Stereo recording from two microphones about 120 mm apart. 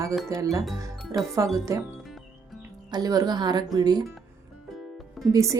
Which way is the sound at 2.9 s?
30° right (ahead or behind).